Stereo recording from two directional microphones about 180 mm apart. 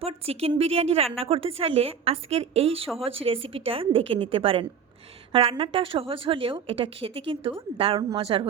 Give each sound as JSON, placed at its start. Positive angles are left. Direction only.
{"t": 0.0, "sound": "a woman's voice", "side_deg": -35}